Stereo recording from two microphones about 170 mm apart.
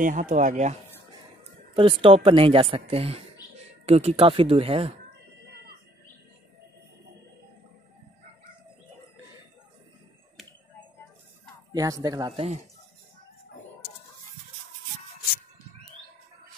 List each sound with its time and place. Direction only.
0.0 s speech: 50° right (ahead or behind)
1.4 s speech: 30° right (ahead or behind)
11.7 s speech: 20° right (ahead or behind)